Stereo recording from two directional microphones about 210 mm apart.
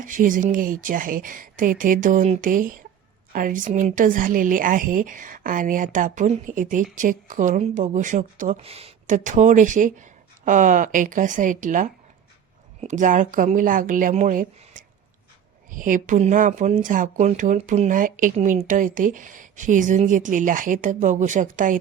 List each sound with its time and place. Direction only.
0.0 s speech: 40° right (ahead or behind)